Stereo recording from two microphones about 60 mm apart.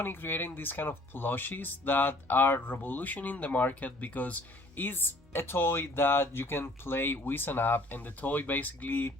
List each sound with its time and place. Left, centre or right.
0.0 s speech: left